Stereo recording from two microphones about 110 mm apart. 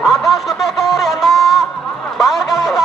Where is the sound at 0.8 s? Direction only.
Centre (ahead or behind).